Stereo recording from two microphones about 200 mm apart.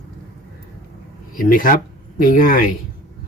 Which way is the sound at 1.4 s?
45° left (ahead or behind).